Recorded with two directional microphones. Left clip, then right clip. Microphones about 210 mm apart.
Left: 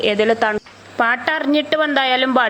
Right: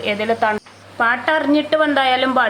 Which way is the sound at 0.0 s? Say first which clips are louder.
Left 2 dB; 25° left (ahead or behind).